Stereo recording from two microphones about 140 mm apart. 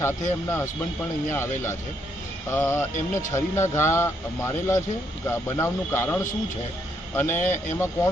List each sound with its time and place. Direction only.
0.4 s a man's voice: 20° left (ahead or behind)